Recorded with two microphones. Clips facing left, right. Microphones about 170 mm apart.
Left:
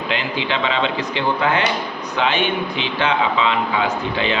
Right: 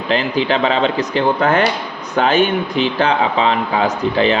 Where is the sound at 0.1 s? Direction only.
40° right (ahead or behind).